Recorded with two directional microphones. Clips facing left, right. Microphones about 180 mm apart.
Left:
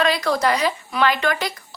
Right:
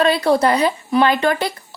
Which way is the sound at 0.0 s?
30° right (ahead or behind).